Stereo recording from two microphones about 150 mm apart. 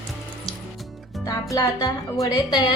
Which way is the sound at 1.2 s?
20° left (ahead or behind).